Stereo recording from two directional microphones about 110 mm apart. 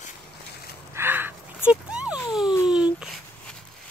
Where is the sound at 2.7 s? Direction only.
10° right (ahead or behind).